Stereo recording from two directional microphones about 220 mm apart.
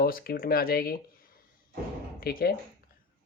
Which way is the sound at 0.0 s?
40° left (ahead or behind).